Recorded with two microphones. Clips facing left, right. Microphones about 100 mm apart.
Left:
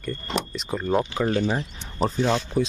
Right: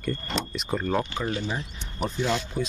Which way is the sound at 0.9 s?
15° left (ahead or behind).